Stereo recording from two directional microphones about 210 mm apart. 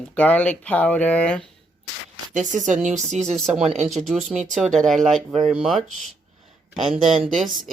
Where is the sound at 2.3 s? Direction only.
35° right (ahead or behind).